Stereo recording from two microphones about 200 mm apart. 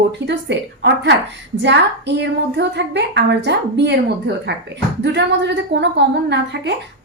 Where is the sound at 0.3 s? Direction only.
60° right (ahead or behind).